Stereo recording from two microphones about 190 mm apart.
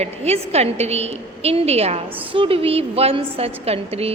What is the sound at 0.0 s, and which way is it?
A woman's voice, 35° right (ahead or behind).